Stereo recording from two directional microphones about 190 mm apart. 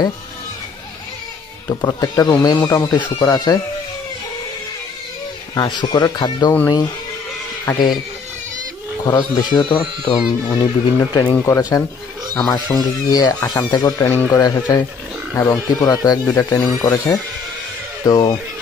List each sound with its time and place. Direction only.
1.7 s speech: 20° left (ahead or behind)
5.5 s speech: 20° left (ahead or behind)
7.6 s speech: 20° left (ahead or behind)
9.0 s speech: 20° left (ahead or behind)